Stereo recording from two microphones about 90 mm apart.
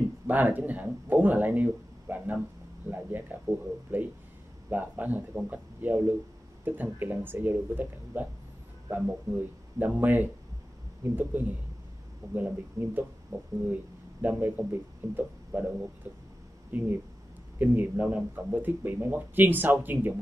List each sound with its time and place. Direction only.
0.3 s speech: 20° right (ahead or behind)
14.2 s speech: 20° right (ahead or behind)
16.7 s speech: 20° right (ahead or behind)